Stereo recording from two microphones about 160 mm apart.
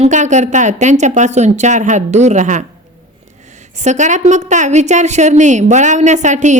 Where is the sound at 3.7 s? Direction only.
50° right (ahead or behind).